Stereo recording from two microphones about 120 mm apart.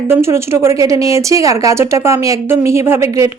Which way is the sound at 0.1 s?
20° right (ahead or behind).